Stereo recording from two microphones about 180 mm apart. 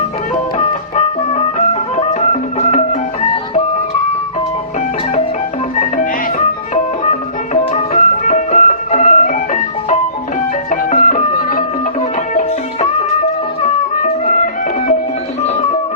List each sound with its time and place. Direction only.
0.5 s music: 40° left (ahead or behind)
7.0 s music: 40° left (ahead or behind)
12.3 s music: 40° left (ahead or behind)
14.0 s music: 45° left (ahead or behind)